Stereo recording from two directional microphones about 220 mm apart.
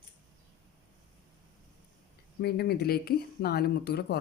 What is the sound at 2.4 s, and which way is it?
Speech, 45° left (ahead or behind).